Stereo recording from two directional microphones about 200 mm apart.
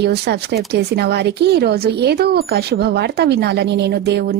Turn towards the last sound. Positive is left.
turn(degrees=-50)  # may be behind; listen again after turning